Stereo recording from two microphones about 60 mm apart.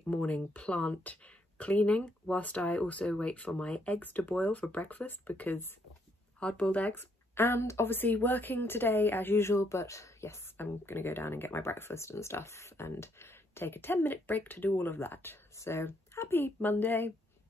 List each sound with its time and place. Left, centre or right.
0.1 s speech: left
6.4 s speech: centre
7.0 s speech: left
10.6 s speech: left
15.5 s speech: left